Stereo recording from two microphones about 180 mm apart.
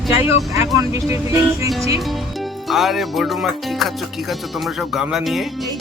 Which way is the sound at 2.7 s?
Centre (ahead or behind).